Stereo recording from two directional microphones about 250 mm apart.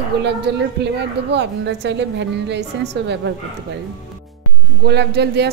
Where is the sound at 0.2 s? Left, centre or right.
Right.